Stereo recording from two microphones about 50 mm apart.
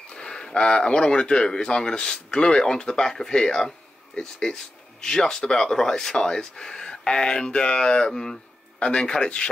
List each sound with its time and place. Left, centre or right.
0.1 s speech: centre